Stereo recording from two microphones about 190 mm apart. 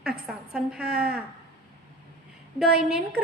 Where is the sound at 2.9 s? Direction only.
5° right (ahead or behind).